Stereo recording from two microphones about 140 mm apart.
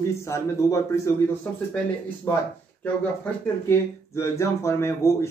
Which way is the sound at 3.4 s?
20° left (ahead or behind).